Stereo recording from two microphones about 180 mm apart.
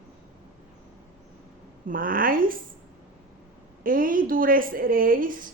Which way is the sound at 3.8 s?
50° right (ahead or behind).